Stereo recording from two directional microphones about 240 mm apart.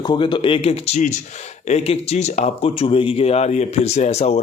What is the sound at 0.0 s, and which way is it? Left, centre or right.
Speech, centre.